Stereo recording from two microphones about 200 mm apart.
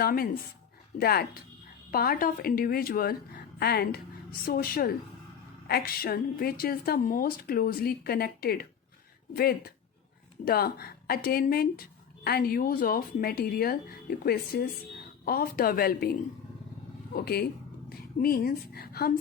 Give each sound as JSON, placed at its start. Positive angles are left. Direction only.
{"t": 0.0, "sound": "speech", "side_deg": 50}
{"t": 17.2, "sound": "speech", "side_deg": 50}